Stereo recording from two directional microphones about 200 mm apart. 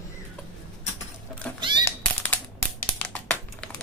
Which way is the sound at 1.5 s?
25° right (ahead or behind).